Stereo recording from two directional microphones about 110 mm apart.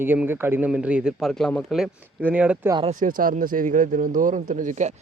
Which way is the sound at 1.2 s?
5° left (ahead or behind).